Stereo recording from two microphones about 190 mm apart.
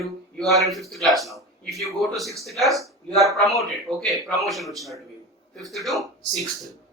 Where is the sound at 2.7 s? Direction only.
15° right (ahead or behind).